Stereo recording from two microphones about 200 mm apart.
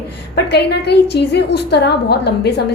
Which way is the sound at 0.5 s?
55° left (ahead or behind).